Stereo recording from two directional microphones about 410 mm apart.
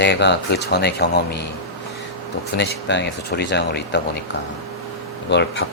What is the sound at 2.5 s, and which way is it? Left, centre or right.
Speech, left.